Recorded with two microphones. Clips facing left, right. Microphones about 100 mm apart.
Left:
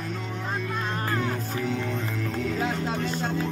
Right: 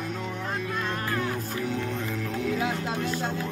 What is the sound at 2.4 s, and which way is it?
Music, 5° right (ahead or behind).